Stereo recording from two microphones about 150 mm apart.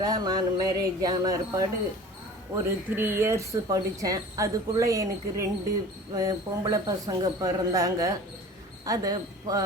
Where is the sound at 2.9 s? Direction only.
15° right (ahead or behind).